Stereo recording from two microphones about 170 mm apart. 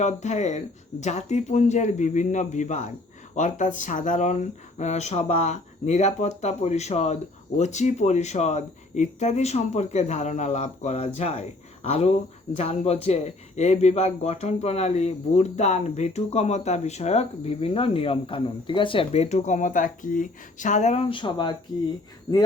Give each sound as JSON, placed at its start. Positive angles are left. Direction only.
{"t": 0.0, "sound": "speech", "side_deg": 45}